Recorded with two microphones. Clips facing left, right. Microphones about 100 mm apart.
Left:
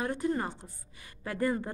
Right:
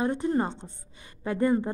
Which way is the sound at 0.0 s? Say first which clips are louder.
Right 5 dB; 20° right (ahead or behind).